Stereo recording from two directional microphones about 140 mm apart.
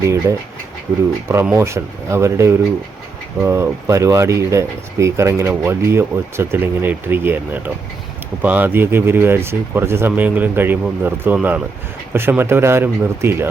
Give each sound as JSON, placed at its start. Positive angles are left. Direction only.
{"t": 0.0, "sound": "speech", "side_deg": -20}
{"t": 1.5, "sound": "speech", "side_deg": -20}